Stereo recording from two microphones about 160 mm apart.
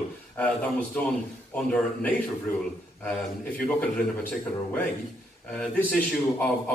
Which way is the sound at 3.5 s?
10° left (ahead or behind).